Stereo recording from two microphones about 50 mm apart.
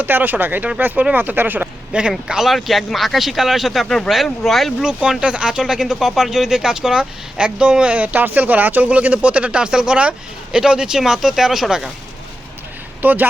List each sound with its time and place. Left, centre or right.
0.0 s speech: right
1.9 s speech: right
2.2 s speech: centre
4.8 s speech: centre
7.9 s speech: right; by 11.9 s centre
13.0 s speech: right